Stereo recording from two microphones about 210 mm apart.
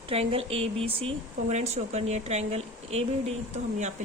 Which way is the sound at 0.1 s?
25° right (ahead or behind).